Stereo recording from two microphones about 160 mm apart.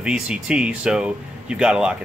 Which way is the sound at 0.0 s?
5° right (ahead or behind).